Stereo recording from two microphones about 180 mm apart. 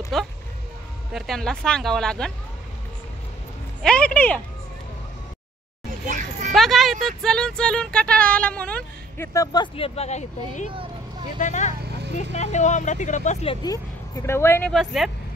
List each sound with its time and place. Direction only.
0.1 s speech: centre (ahead or behind)
3.8 s speech: 5° left (ahead or behind)
6.0 s children playing: 45° right (ahead or behind)
6.5 s speech: centre (ahead or behind); by 13.6 s 40° left (ahead or behind)
13.6 s speech: 20° left (ahead or behind)
14.7 s speech: centre (ahead or behind)